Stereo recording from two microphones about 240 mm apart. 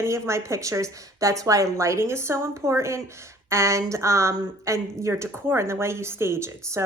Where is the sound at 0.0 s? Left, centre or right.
Centre.